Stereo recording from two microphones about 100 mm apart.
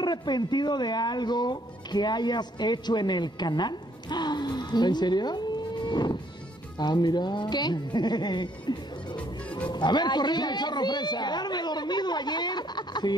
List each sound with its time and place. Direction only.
0.0 s speech: 45° left (ahead or behind)
5.9 s music: 50° left (ahead or behind)
6.8 s speech: 45° left (ahead or behind)
9.1 s music: 15° left (ahead or behind)
9.7 s speech: 45° left (ahead or behind)